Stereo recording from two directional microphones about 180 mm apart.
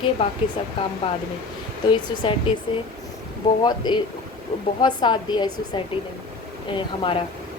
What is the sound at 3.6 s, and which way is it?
A woman's voice, 25° left (ahead or behind).